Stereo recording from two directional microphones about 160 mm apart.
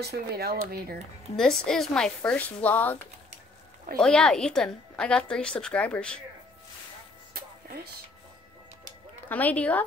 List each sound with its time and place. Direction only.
0.0 s speech: 80° right
1.3 s a woman's voice: 5° left (ahead or behind)
4.0 s a woman's voice: 5° left (ahead or behind)
7.3 s music: 70° right (ahead or behind)
9.3 s speech: 10° left (ahead or behind)